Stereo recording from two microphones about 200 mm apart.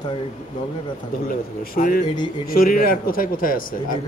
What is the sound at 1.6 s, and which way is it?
Speech, 45° left (ahead or behind).